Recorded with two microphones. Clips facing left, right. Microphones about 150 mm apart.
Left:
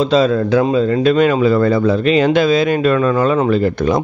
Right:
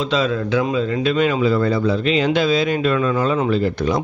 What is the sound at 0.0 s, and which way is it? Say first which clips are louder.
Speech: left 7 dB; 40° left (ahead or behind).